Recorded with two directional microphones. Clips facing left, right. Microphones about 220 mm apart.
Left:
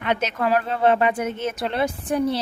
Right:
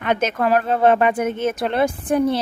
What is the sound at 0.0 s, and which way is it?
Speech, 50° right (ahead or behind).